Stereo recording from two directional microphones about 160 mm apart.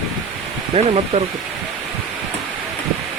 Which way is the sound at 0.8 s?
40° right (ahead or behind).